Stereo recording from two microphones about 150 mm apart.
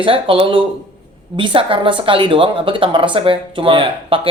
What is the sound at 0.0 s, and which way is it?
Speech, 35° right (ahead or behind).